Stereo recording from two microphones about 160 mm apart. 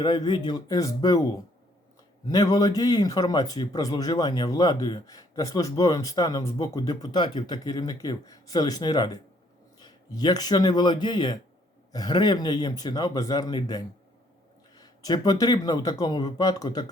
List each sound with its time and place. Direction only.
0.0 s speech: 25° left (ahead or behind)